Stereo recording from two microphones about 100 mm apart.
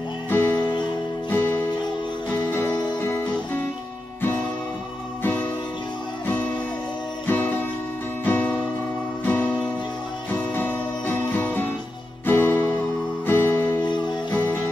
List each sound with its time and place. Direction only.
0.3 s music: 20° left (ahead or behind)
3.0 s guitar: 25° left (ahead or behind)
7.2 s music: 20° left (ahead or behind)